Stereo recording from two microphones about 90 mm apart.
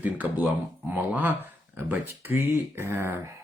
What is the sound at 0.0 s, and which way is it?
Speech, 15° right (ahead or behind).